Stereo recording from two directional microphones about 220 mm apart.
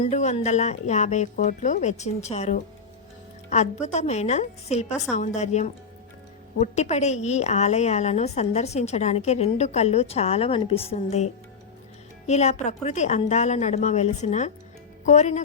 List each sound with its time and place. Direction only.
0.0 s a woman's voice: 30° left (ahead or behind)